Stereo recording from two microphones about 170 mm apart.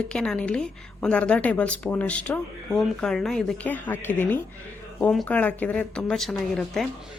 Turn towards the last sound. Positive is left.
turn(degrees=5)  # may be behind; listen again after turning